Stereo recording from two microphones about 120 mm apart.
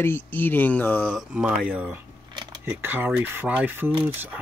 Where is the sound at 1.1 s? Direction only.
10° right (ahead or behind).